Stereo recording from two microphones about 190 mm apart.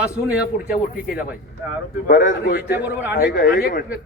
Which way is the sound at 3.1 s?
60° left (ahead or behind).